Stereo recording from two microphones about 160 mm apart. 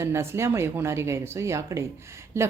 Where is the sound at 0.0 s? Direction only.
15° right (ahead or behind).